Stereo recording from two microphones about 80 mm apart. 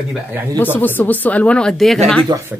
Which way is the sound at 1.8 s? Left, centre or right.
Centre.